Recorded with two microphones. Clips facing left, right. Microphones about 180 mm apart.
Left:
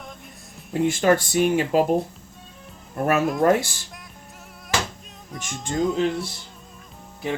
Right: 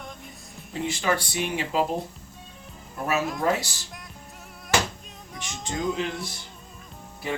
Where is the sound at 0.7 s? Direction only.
50° left (ahead or behind).